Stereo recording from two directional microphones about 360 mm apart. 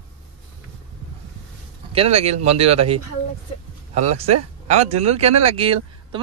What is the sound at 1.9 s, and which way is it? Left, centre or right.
Speech, centre.